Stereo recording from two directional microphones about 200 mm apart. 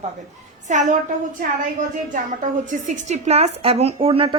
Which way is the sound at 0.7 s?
40° right (ahead or behind).